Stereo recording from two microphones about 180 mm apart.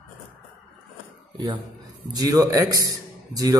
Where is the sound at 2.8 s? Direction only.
20° right (ahead or behind).